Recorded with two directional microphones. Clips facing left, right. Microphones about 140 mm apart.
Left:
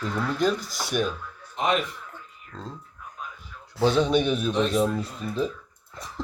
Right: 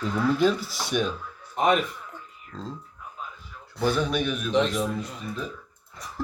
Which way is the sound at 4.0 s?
30° left (ahead or behind).